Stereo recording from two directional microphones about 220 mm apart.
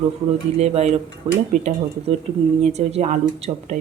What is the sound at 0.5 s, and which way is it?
Speech, 30° right (ahead or behind).